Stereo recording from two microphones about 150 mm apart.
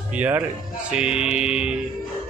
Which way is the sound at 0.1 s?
10° right (ahead or behind).